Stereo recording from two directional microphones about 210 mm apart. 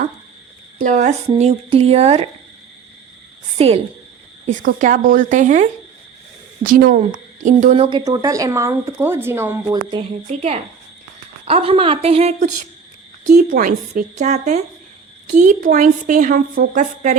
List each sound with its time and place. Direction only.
0.8 s a woman's voice: 35° right (ahead or behind)
3.6 s a woman's voice: 30° right (ahead or behind)
7.9 s speech: 20° right (ahead or behind)
9.9 s a woman's voice: 30° right (ahead or behind)